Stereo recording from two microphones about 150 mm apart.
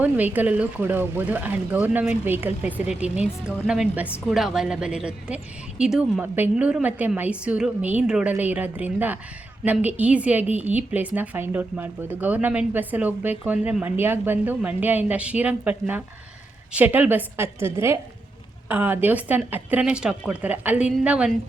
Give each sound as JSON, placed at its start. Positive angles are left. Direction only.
{"t": 0.0, "sound": "speech", "side_deg": -10}